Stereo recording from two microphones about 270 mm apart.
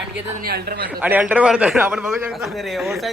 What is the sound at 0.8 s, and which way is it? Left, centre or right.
Speech, centre.